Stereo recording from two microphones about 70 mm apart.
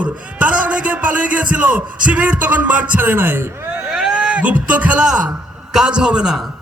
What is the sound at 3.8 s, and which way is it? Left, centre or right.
A man's voice, centre.